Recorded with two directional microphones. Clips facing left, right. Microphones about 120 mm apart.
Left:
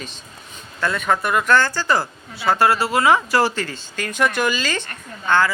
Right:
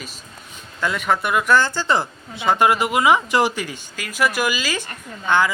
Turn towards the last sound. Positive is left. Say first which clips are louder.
# even
turn(degrees=-15)  # may be behind; listen again after turning